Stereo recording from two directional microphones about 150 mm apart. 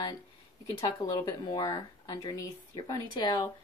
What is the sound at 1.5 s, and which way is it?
Speech, 25° left (ahead or behind).